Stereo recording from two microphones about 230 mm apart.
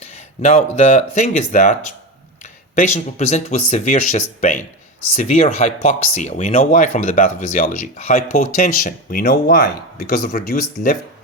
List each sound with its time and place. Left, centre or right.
0.0 s speech: left